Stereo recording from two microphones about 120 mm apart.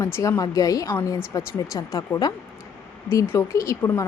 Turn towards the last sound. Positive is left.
turn(degrees=20)  # may be behind; listen again after turning